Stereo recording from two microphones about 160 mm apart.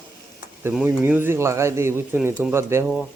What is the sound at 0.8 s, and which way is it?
A man's voice, 15° right (ahead or behind).